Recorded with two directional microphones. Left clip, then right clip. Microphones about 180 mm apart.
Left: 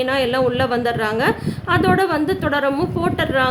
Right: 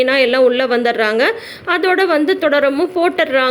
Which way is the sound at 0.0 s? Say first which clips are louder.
Right 6 dB; 20° right (ahead or behind).